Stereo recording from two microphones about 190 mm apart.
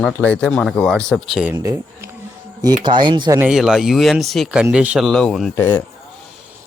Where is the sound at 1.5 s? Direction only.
15° right (ahead or behind).